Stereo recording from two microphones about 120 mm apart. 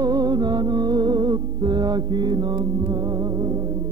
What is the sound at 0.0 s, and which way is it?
Music, 35° right (ahead or behind).